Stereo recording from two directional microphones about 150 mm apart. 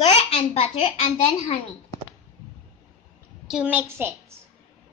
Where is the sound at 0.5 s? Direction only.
40° left (ahead or behind).